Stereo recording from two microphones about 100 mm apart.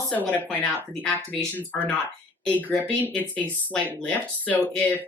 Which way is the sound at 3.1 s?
15° left (ahead or behind).